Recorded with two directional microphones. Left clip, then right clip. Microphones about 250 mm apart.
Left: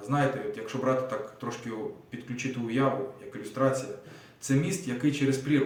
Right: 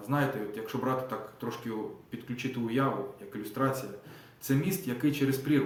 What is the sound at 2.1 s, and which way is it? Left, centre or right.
Speech, centre.